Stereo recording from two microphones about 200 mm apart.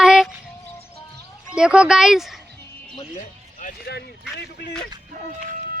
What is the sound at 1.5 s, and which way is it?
Speech, 5° right (ahead or behind).